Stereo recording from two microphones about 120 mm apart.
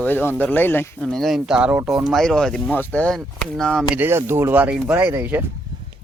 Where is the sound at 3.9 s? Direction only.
20° right (ahead or behind).